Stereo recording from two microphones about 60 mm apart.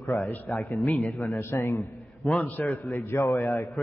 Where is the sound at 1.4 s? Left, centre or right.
Left.